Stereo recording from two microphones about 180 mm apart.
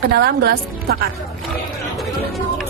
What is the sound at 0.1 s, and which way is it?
Speech, 60° right (ahead or behind).